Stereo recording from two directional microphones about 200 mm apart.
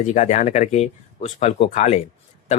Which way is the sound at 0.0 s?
35° left (ahead or behind).